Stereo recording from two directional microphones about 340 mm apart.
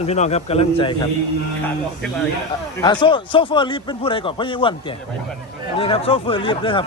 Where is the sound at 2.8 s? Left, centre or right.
Centre.